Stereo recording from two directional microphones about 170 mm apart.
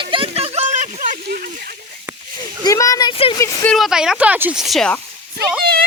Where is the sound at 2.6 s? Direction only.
20° left (ahead or behind).